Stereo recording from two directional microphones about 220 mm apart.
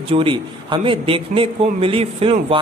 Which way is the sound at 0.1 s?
25° right (ahead or behind).